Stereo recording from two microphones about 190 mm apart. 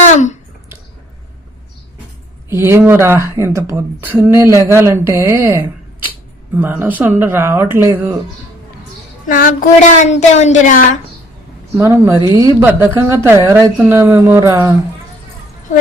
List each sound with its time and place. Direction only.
0.0 s a sound: 40° left (ahead or behind)
2.5 s speech: 15° right (ahead or behind)
9.2 s speech: 45° left (ahead or behind)
11.8 s speech: 15° right (ahead or behind)